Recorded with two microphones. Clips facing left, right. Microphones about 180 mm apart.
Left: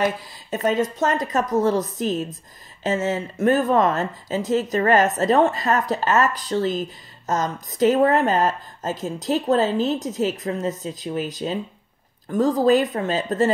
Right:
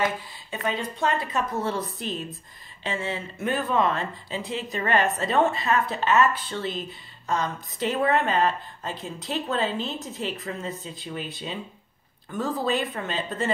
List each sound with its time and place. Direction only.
0.0 s speech: 45° left (ahead or behind)